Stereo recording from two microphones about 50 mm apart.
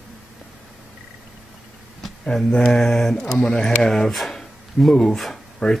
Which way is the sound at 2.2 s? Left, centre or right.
Centre.